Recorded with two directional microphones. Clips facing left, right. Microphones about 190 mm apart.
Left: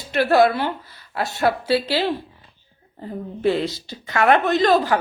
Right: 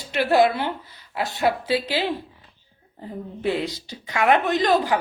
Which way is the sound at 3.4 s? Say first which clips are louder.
Left 4 dB; 15° right (ahead or behind).